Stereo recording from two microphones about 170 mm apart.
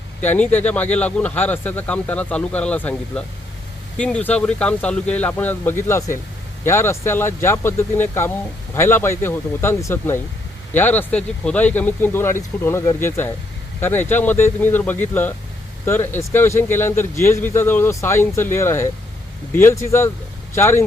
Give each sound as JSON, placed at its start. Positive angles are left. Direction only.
{"t": 0.2, "sound": "speech", "side_deg": 10}